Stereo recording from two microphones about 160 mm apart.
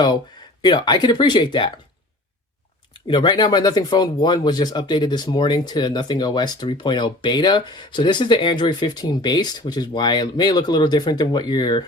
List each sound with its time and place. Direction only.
0.6 s speech: 25° left (ahead or behind)
3.1 s speech: 30° left (ahead or behind)